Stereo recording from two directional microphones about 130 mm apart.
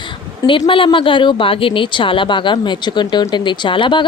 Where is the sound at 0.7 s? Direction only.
40° left (ahead or behind).